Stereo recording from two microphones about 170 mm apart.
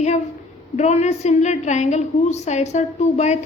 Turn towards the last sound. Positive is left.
turn(degrees=45)  # may be behind; listen again after turning